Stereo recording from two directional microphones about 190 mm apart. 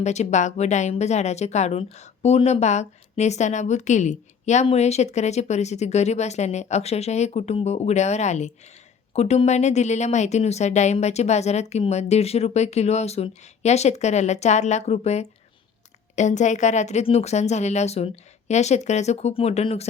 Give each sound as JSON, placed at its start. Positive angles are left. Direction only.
{"t": 0.0, "sound": "a woman's voice", "side_deg": 35}